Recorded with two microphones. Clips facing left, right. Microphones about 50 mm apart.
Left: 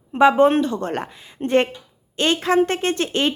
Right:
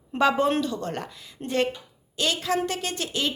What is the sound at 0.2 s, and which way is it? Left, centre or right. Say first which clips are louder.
A woman's voice: left 8 dB; left.